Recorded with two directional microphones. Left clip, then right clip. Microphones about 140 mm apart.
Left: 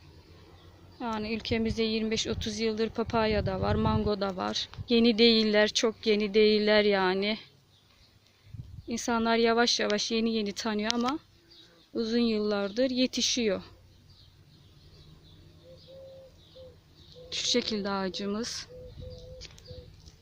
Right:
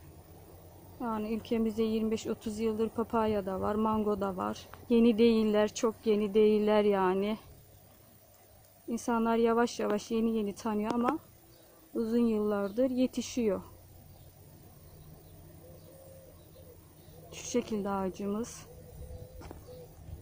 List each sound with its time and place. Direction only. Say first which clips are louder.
0.9 s a woman's voice: left 2 dB; 10° left (ahead or behind)
8.9 s a woman's voice: left 3 dB; 10° left (ahead or behind)
12.0 s a woman's voice: left 2 dB; 15° left (ahead or behind)
17.5 s a woman's voice: left 2 dB; 15° left (ahead or behind)
18.3 s speech: left 2 dB; 35° left (ahead or behind)